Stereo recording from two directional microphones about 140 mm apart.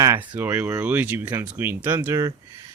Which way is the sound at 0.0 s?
15° right (ahead or behind).